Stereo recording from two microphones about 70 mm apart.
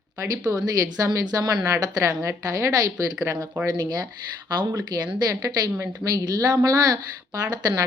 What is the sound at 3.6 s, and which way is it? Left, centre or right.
Speech, right.